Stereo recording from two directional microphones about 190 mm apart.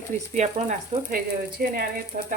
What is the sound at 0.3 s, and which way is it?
A woman's voice, 40° right (ahead or behind).